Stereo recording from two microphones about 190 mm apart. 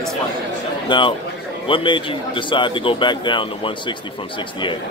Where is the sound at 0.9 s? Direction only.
25° left (ahead or behind).